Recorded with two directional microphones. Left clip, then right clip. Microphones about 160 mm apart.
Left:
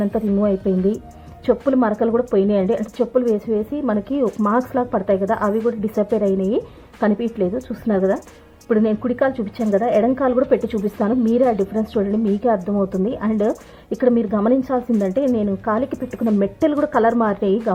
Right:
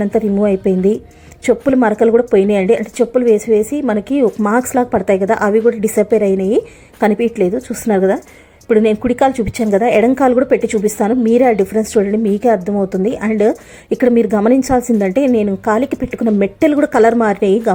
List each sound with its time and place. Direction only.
0.0 s a woman's voice: 20° right (ahead or behind)